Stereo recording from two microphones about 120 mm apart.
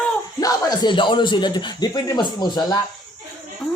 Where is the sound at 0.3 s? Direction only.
35° left (ahead or behind).